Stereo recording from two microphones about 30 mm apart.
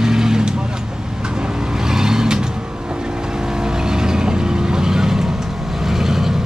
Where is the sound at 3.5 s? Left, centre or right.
Right.